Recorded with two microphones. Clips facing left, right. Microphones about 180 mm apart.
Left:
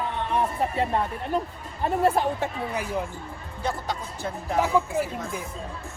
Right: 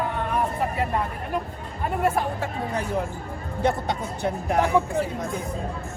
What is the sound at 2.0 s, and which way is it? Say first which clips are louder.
Speech: left 1 dB; 30° left (ahead or behind).